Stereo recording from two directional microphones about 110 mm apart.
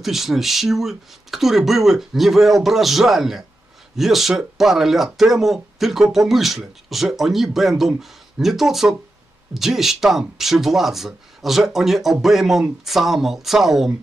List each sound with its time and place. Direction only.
0.0 s speech: centre (ahead or behind)